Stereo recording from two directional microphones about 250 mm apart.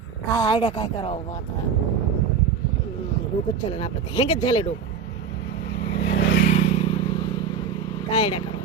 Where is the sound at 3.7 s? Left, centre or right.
Left.